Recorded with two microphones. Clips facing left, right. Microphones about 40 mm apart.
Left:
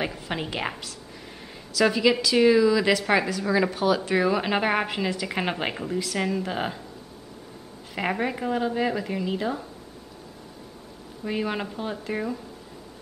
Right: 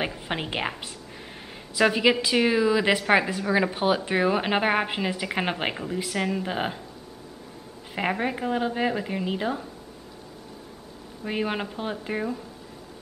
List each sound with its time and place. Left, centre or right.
0.3 s a woman's voice: centre
1.8 s a woman's voice: right
7.9 s a woman's voice: centre
11.2 s a woman's voice: centre